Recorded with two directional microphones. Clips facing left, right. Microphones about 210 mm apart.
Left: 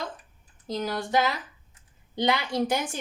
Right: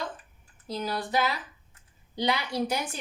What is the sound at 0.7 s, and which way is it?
Speech, 45° left (ahead or behind).